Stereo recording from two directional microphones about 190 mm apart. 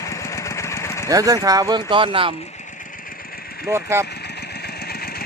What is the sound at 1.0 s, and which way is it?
Speech, 20° right (ahead or behind).